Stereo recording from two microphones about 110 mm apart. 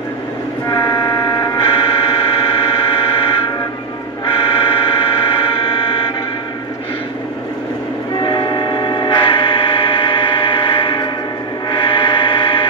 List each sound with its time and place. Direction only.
0.7 s vehicle: 40° left (ahead or behind)
1.7 s music: 55° left (ahead or behind)
2.9 s fire alarm: 55° left (ahead or behind)
4.3 s a sound: 55° left (ahead or behind)
8.2 s train: 45° left (ahead or behind)
11.8 s music: 50° left (ahead or behind)